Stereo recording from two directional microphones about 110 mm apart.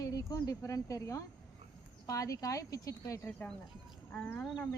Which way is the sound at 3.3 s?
15° left (ahead or behind).